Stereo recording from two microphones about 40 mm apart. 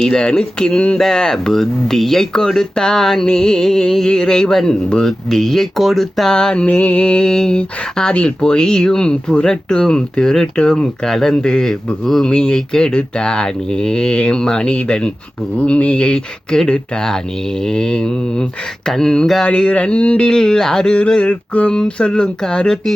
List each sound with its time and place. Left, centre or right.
0.0 s speech: left
0.9 s music: centre
5.8 s speech: centre
6.3 s speech: left
6.7 s speech: left
11.0 s music: centre
12.3 s speech: centre
18.9 s music: centre
19.5 s speech: left
21.2 s a sound: left
21.8 s speech: left